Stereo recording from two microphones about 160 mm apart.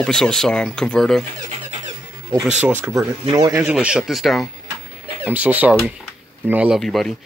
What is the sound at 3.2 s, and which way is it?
Speech, 25° right (ahead or behind).